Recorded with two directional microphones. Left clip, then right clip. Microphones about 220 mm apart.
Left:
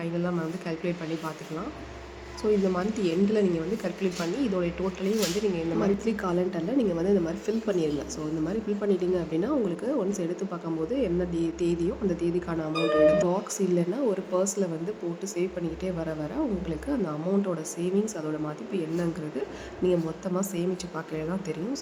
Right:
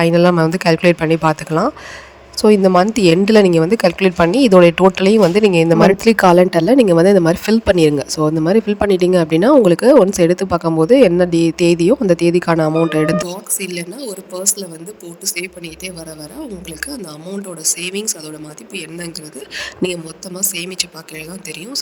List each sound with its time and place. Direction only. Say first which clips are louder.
0.0 s a woman's voice: right 19 dB; 50° right (ahead or behind)
14.1 s speech: right 4 dB; centre (ahead or behind)
17.6 s a woman's voice: right 7 dB; 50° right (ahead or behind)
19.5 s a woman's voice: right 7 dB; 50° right (ahead or behind)